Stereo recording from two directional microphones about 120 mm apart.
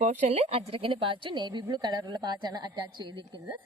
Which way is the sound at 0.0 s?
75° right (ahead or behind).